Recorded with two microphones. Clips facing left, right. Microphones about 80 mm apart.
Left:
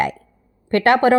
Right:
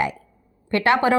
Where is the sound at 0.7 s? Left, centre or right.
Left.